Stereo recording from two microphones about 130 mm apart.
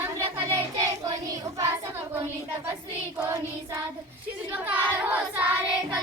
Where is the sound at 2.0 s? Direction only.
20° right (ahead or behind).